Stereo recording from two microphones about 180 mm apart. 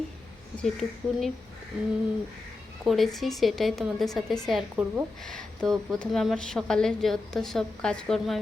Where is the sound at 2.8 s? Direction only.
Centre (ahead or behind).